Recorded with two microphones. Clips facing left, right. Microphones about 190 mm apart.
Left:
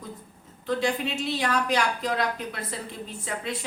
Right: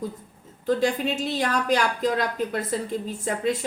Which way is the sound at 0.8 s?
45° right (ahead or behind).